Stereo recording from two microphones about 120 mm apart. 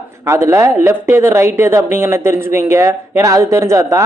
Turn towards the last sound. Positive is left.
turn(degrees=-25)  # may be behind; listen again after turning